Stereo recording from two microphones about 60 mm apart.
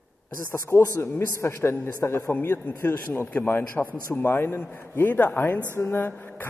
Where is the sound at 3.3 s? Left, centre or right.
Left.